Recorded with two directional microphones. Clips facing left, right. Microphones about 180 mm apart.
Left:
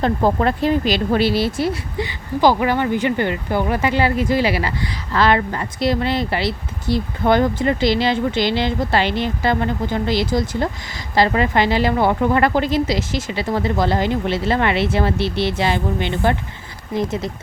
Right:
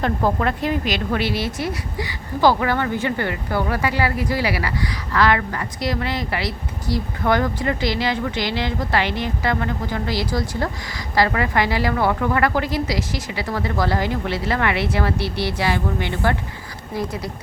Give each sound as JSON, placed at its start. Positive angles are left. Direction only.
{"t": 0.0, "sound": "a woman's voice", "side_deg": 30}